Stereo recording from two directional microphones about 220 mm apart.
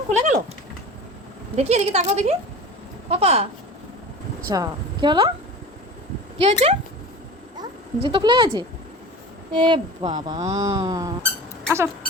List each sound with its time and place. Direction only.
0.1 s a sound: 35° right (ahead or behind)
1.5 s speech: 30° right (ahead or behind)
4.4 s a woman's voice: 15° right (ahead or behind)
6.4 s speech: 30° right (ahead or behind)
8.1 s speech: 20° right (ahead or behind)